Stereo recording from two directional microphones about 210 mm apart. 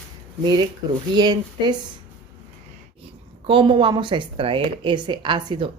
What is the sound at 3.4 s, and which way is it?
Speech, 25° right (ahead or behind).